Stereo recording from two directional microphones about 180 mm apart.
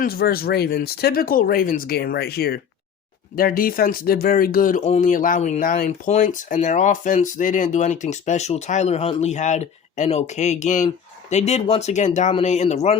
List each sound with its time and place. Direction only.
0.0 s speech: 60° left (ahead or behind); by 13.0 s 35° left (ahead or behind)